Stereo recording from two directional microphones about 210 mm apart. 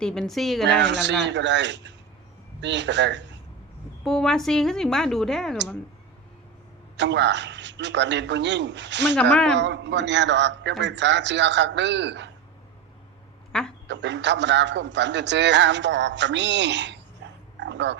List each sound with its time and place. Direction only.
0.0 s a woman's voice: 5° left (ahead or behind)
0.8 s a man's voice: 55° right (ahead or behind)
4.0 s a woman's voice: centre (ahead or behind)
6.9 s a man's voice: 55° right (ahead or behind)
9.3 s a woman's voice: 5° left (ahead or behind)
9.6 s a man's voice: 55° right (ahead or behind)
13.8 s a man's voice: 55° right (ahead or behind)
17.6 s a sound: 60° right (ahead or behind)